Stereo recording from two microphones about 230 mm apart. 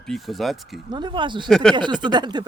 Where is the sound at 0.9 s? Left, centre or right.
Centre.